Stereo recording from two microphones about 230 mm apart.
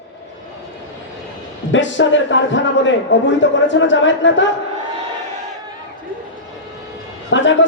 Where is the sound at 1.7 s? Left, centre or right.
Left.